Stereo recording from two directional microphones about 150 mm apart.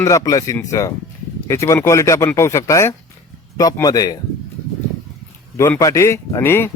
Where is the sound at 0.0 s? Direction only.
20° left (ahead or behind).